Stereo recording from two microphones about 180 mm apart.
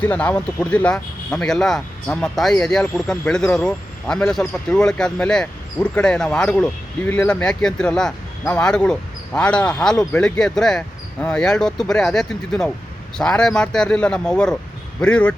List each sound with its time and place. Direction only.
0.0 s speech: 10° left (ahead or behind)